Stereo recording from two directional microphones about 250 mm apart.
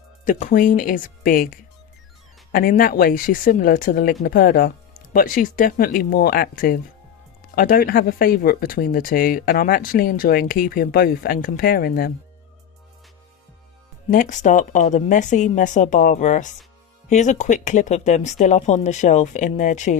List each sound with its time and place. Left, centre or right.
0.3 s speech: left
14.1 s speech: left